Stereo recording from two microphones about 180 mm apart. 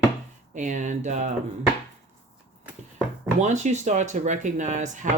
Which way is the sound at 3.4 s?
40° right (ahead or behind).